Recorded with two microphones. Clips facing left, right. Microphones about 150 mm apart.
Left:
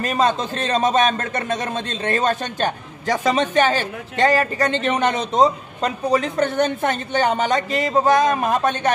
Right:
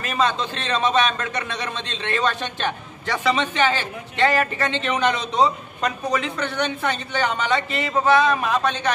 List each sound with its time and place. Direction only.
0.0 s speech: 40° left (ahead or behind)
5.8 s speech: 35° left (ahead or behind); by 8.9 s 50° left (ahead or behind)